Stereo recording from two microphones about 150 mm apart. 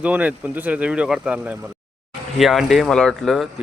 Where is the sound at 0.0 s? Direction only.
10° right (ahead or behind).